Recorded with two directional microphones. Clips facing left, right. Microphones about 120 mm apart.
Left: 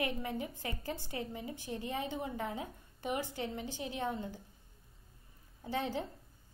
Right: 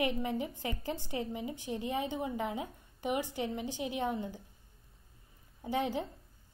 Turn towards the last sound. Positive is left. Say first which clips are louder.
# right 3 dB
turn(degrees=-15)  # may be behind; listen again after turning